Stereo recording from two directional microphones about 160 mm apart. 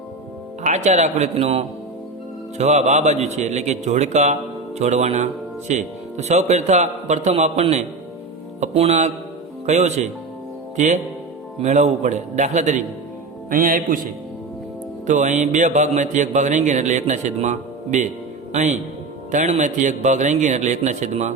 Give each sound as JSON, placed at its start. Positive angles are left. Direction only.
{"t": 0.6, "sound": "music", "side_deg": -50}
{"t": 13.5, "sound": "speech", "side_deg": -55}
{"t": 15.0, "sound": "music", "side_deg": -50}